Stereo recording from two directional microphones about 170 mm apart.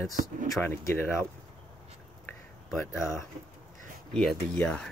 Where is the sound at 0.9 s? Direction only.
15° left (ahead or behind).